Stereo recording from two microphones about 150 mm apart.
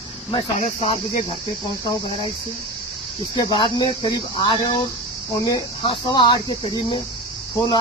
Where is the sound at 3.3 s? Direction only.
30° left (ahead or behind).